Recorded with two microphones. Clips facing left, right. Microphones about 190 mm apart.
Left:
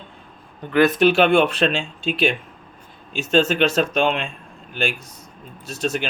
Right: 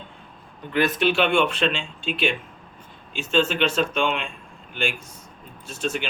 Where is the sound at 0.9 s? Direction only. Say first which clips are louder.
Left 3 dB; 40° left (ahead or behind).